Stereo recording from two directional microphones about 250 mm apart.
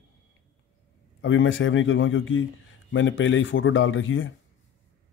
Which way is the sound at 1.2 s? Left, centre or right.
Left.